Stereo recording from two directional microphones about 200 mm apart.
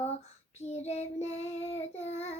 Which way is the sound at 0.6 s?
35° left (ahead or behind).